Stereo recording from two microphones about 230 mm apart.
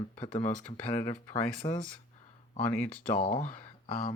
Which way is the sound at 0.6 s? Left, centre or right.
Centre.